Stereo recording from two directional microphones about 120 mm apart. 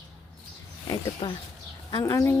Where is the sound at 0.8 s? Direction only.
35° left (ahead or behind).